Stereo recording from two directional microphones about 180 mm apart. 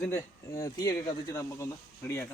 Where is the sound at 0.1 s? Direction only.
20° left (ahead or behind).